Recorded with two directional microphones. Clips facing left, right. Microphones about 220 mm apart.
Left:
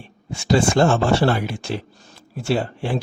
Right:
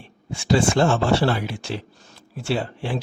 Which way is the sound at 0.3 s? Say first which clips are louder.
Left 1 dB; 40° left (ahead or behind).